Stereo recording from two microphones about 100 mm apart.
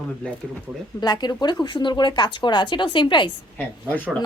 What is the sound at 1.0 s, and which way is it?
Speech, 45° left (ahead or behind).